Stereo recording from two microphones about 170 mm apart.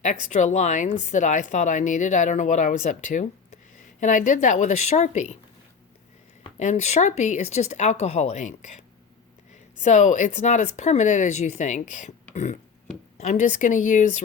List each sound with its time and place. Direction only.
0.0 s speech: 45° left (ahead or behind)
6.6 s speech: 40° left (ahead or behind)
9.8 s speech: 45° left (ahead or behind)